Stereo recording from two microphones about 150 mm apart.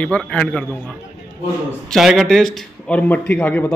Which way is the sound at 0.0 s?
10° left (ahead or behind).